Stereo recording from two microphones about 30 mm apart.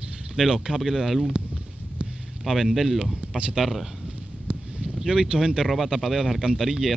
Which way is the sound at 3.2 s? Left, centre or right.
Right.